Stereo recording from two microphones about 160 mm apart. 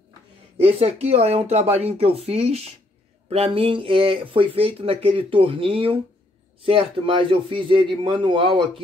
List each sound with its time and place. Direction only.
0.7 s speech: 40° right (ahead or behind)